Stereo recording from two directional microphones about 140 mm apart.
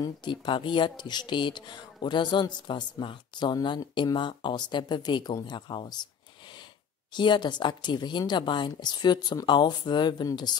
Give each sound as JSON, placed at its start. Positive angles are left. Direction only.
{"t": 0.0, "sound": "speech", "side_deg": 35}
{"t": 7.2, "sound": "speech", "side_deg": 35}